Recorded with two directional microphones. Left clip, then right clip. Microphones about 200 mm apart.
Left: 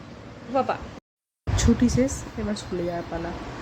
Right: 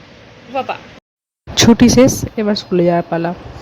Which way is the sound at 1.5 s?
45° right (ahead or behind).